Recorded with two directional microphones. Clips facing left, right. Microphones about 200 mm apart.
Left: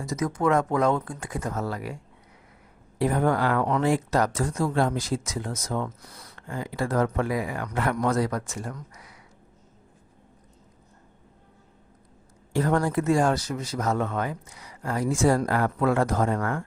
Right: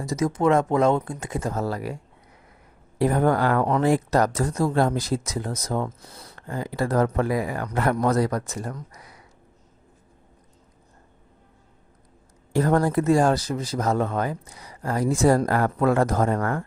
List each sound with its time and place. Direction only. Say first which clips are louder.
0.0 s speech: right 3 dB; 30° right (ahead or behind)
3.0 s speech: right 3 dB; 40° right (ahead or behind)
12.5 s speech: right 3 dB; 40° right (ahead or behind)